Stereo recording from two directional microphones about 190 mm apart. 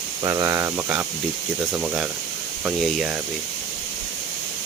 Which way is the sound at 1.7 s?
5° right (ahead or behind).